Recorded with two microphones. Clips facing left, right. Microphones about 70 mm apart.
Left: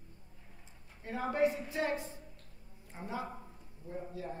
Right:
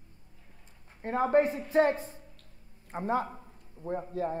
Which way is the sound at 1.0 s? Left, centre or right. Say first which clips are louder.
Right 6 dB; right.